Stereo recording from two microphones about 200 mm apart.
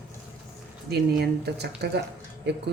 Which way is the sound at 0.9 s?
55° right (ahead or behind).